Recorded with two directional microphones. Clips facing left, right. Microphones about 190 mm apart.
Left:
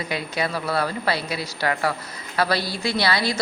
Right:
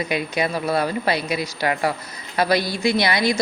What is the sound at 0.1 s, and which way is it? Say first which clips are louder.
A woman's voice: right 1 dB; 15° right (ahead or behind).